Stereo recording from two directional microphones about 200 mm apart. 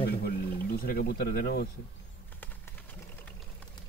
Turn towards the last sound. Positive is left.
turn(degrees=10)  # may be behind; listen again after turning